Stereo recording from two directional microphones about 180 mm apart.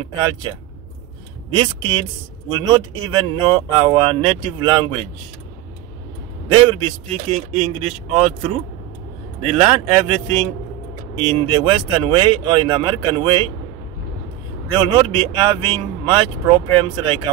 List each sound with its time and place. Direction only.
1.5 s speech: 25° right (ahead or behind)
6.7 s speech: 30° right (ahead or behind)
14.7 s speech: 25° right (ahead or behind)